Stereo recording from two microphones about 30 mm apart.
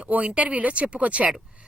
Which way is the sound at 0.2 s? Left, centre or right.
Right.